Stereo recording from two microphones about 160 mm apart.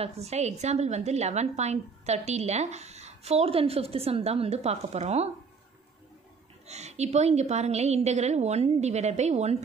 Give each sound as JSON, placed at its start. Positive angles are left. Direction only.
{"t": 0.0, "sound": "a woman's voice", "side_deg": -40}
{"t": 6.7, "sound": "a woman's voice", "side_deg": -45}